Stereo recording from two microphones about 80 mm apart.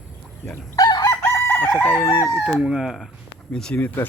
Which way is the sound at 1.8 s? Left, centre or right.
Left.